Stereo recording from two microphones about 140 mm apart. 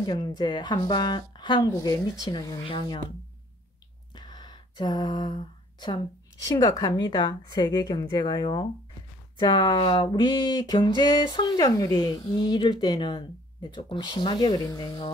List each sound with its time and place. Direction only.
0.0 s speech: 30° left (ahead or behind)
4.1 s a sound: 30° left (ahead or behind)
6.4 s speech: 25° left (ahead or behind)